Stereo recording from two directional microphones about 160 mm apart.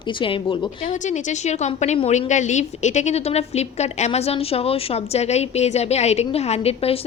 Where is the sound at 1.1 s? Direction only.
45° left (ahead or behind).